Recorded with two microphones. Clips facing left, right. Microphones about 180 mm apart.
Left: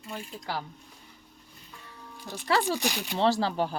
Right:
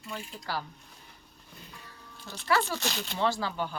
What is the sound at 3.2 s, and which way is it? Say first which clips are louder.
Speech: left 5 dB; 35° left (ahead or behind).